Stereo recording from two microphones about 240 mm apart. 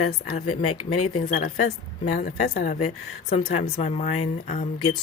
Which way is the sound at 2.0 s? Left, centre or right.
Left.